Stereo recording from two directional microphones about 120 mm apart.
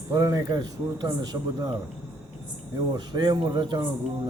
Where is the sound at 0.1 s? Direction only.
25° right (ahead or behind).